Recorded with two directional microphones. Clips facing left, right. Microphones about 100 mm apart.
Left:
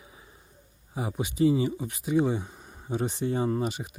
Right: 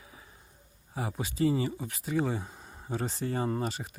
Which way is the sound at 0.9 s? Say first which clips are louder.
Left 3 dB; 15° left (ahead or behind).